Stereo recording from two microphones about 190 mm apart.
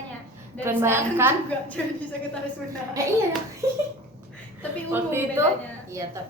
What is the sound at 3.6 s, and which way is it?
Speech, 15° right (ahead or behind).